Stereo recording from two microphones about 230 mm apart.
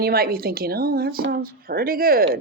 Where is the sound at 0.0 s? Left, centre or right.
Right.